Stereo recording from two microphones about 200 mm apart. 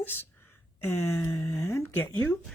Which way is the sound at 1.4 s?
15° left (ahead or behind).